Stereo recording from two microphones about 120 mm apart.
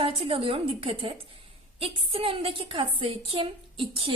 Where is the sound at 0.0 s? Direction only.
50° right (ahead or behind).